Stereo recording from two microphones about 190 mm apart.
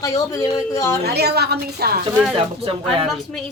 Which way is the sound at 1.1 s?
60° right (ahead or behind).